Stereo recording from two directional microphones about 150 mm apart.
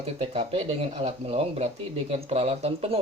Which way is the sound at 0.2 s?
40° right (ahead or behind).